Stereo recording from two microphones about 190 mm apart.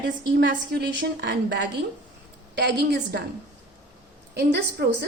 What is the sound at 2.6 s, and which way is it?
Speech, 60° right (ahead or behind).